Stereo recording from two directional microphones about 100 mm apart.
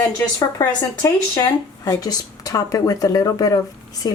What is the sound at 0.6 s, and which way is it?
A woman's voice, 30° left (ahead or behind).